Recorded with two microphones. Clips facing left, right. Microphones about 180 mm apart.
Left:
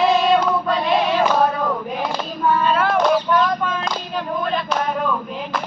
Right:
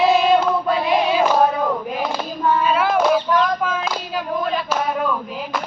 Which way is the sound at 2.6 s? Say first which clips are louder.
Right 1 dB; 5° right (ahead or behind).